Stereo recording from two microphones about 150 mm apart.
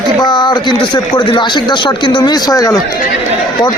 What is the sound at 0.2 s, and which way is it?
Speech, 30° left (ahead or behind).